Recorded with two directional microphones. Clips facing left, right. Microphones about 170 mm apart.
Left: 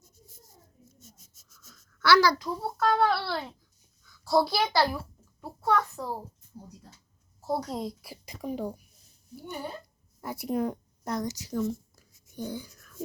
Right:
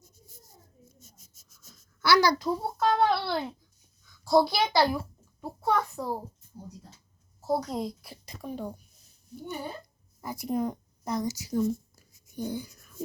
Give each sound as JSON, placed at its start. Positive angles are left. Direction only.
{"t": 1.7, "sound": "babbling", "side_deg": -15}
{"t": 2.4, "sound": "a child's voice", "side_deg": -20}
{"t": 7.6, "sound": "a woman's voice", "side_deg": 0}
{"t": 10.2, "sound": "speech", "side_deg": 0}